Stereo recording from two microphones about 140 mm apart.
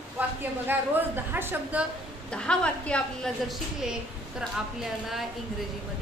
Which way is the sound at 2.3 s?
5° left (ahead or behind).